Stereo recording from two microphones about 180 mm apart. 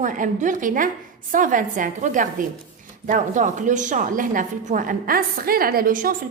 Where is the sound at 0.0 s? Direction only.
45° right (ahead or behind).